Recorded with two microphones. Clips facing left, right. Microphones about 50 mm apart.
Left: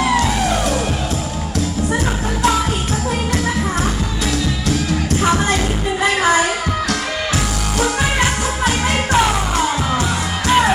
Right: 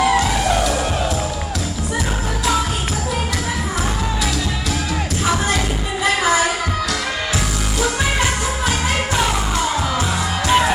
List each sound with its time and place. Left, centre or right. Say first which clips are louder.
6.0 s music: left 1 dB; left
10.5 s music: left 2 dB; centre